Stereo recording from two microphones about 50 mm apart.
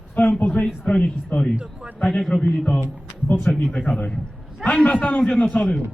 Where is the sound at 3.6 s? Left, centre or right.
Left.